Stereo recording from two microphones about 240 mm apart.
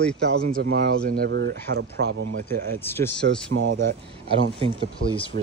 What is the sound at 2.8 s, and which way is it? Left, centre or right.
Speech, centre.